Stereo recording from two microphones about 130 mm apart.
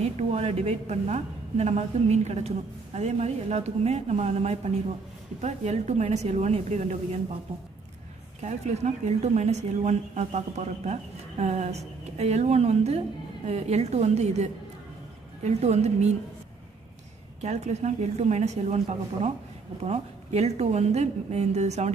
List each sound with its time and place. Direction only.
0.0 s speech: 55° right (ahead or behind)
8.4 s speech: 60° right (ahead or behind)
17.4 s speech: 60° right (ahead or behind)
19.8 s speech: 55° right (ahead or behind)